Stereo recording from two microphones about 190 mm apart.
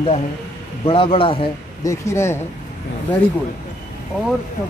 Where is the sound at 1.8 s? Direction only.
15° left (ahead or behind).